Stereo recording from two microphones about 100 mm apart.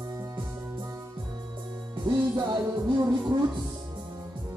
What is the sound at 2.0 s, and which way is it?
Music, 50° right (ahead or behind).